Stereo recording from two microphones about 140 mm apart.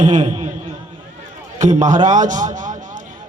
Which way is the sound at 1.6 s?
60° right (ahead or behind).